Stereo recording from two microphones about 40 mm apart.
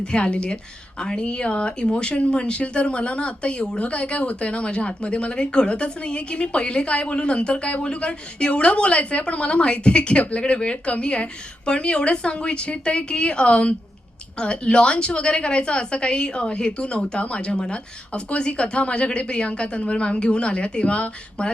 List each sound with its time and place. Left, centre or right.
0.0 s speech: left